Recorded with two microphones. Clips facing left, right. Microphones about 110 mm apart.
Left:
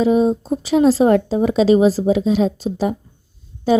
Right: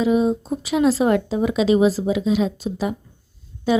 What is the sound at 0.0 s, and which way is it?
A woman's voice, 35° left (ahead or behind).